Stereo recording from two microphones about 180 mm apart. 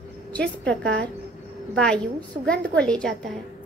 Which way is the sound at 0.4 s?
80° right.